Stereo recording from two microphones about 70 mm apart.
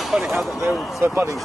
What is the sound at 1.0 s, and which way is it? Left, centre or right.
Speech, right.